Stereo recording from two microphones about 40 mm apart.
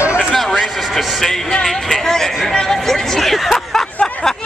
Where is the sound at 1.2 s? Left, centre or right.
Centre.